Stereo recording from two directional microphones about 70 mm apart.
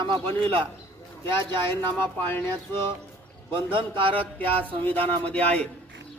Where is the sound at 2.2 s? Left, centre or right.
Left.